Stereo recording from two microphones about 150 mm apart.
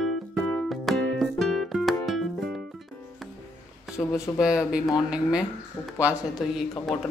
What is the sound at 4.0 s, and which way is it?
Speech, 5° left (ahead or behind).